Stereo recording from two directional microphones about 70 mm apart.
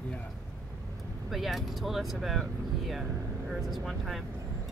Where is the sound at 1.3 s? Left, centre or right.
Centre.